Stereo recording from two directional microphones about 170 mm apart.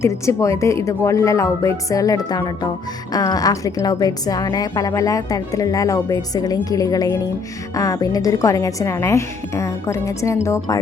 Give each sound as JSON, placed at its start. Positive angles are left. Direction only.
{"t": 0.0, "sound": "a woman's voice", "side_deg": 15}